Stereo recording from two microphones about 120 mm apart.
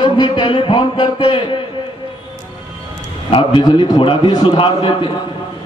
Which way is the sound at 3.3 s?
45° left (ahead or behind).